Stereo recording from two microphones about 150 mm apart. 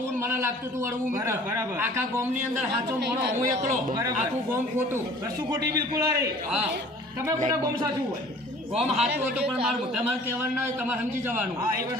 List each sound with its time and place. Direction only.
0.2 s a man's voice: 15° right (ahead or behind)
5.5 s a man's voice: 25° right (ahead or behind)
7.4 s a man's voice: 25° right (ahead or behind)
8.7 s a man's voice: 45° right (ahead or behind)